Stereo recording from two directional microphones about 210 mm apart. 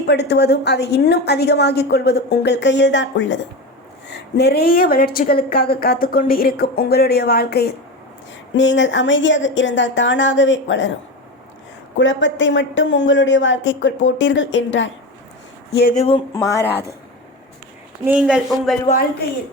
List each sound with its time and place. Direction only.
0.0 s speech: 55° left (ahead or behind)
8.5 s a woman's voice: 60° left (ahead or behind)
11.9 s a woman's voice: 60° left (ahead or behind)
16.0 s speech: 30° left (ahead or behind)
16.3 s speech: 15° left (ahead or behind)
18.0 s speech: 5° right (ahead or behind)